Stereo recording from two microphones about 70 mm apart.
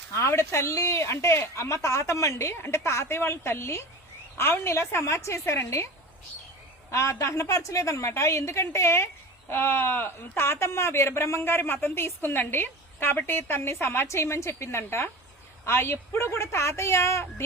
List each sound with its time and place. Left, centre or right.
0.1 s speech: left
6.9 s a woman's voice: left